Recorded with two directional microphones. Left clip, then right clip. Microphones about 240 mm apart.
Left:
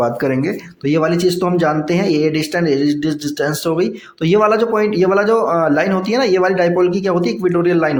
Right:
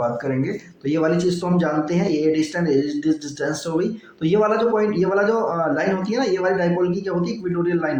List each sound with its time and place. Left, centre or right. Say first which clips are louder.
0.9 s speech: left 5 dB; left